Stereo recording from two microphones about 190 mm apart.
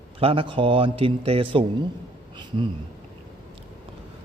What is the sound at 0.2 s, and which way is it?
A man's voice, 30° right (ahead or behind).